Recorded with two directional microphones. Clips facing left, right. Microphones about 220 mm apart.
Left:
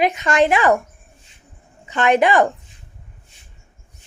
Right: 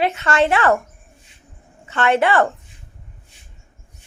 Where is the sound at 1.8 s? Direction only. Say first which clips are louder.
Left 2 dB; 15° left (ahead or behind).